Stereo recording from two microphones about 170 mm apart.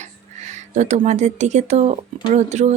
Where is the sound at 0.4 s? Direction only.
45° right (ahead or behind).